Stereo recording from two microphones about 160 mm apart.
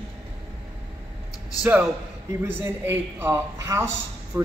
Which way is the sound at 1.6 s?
10° right (ahead or behind).